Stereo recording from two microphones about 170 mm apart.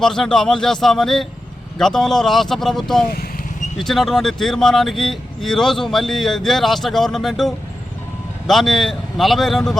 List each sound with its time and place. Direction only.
0.0 s speech: 5° left (ahead or behind)